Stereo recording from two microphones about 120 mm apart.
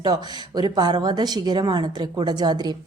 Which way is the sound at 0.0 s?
35° right (ahead or behind).